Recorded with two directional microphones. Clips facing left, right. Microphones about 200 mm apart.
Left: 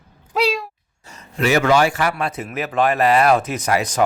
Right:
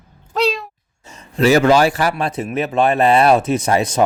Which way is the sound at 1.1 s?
30° right (ahead or behind).